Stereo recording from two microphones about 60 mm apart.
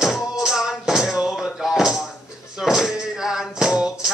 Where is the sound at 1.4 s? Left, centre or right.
Centre.